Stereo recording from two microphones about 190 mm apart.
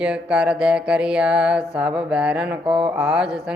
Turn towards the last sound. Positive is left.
turn(degrees=-5)  # may be behind; listen again after turning